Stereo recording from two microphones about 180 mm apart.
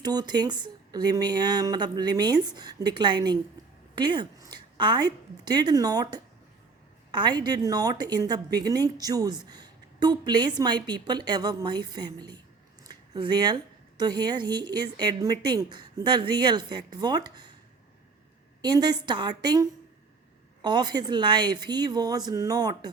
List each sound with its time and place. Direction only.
0.0 s a woman's voice: 20° right (ahead or behind)
18.6 s a woman's voice: 25° right (ahead or behind)